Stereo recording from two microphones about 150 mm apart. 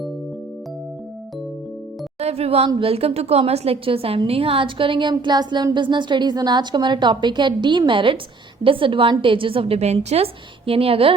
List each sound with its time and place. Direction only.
2.1 s a woman's voice: 45° right (ahead or behind)